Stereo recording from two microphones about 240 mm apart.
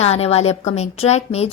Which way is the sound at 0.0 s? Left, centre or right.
Left.